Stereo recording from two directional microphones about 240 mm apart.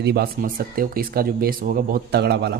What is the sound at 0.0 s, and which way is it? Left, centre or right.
Speech, right.